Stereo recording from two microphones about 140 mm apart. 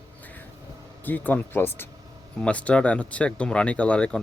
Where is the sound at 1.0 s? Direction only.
15° left (ahead or behind).